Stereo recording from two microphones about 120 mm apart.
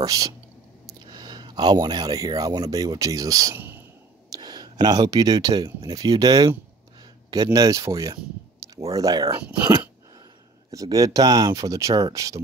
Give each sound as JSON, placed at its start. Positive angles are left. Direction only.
{"t": 0.0, "sound": "speech", "side_deg": -30}
{"t": 3.5, "sound": "a sound", "side_deg": -15}
{"t": 4.3, "sound": "speech", "side_deg": -35}
{"t": 7.5, "sound": "speech", "side_deg": -30}